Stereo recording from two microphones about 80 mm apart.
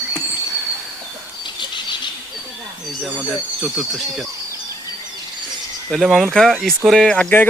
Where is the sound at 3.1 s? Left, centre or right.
Right.